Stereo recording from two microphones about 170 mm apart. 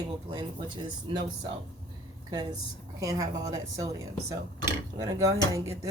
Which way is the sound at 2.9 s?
20° right (ahead or behind).